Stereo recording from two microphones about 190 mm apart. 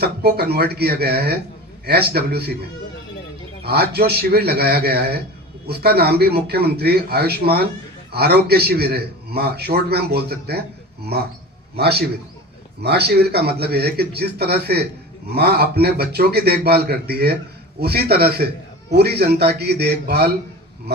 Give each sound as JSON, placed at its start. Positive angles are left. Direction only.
{"t": 0.0, "sound": "a man's voice", "side_deg": -55}
{"t": 3.6, "sound": "a man's voice", "side_deg": -55}
{"t": 11.8, "sound": "a man's voice", "side_deg": -60}